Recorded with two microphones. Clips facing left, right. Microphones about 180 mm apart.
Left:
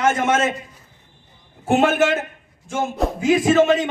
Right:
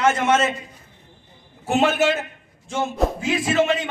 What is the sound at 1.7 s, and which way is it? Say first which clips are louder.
Speech: left 2 dB; 50° left (ahead or behind).